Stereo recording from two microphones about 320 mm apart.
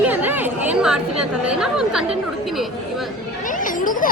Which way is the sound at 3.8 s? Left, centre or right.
Left.